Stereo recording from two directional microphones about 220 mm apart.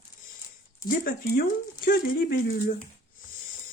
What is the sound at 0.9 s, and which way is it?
Speech, 40° left (ahead or behind).